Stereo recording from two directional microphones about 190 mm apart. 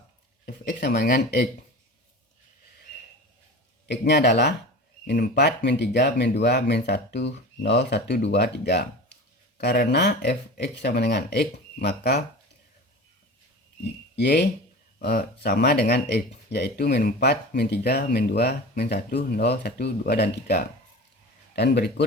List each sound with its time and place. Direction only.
0.4 s speech: 50° left (ahead or behind)
3.8 s speech: 60° left (ahead or behind)
14.2 s speech: 60° left (ahead or behind)